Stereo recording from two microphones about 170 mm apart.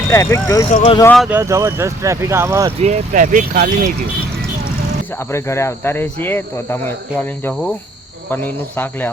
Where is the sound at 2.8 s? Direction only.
45° right (ahead or behind).